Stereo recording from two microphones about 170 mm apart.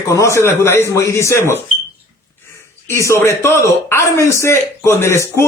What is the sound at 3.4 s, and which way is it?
A man's voice, 15° left (ahead or behind).